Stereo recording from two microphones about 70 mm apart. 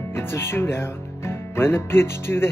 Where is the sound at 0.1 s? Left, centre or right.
Left.